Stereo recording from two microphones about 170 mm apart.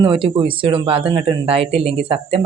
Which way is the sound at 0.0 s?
30° right (ahead or behind).